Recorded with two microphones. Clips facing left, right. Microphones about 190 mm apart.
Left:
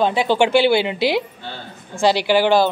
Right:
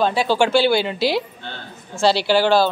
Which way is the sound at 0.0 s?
20° left (ahead or behind).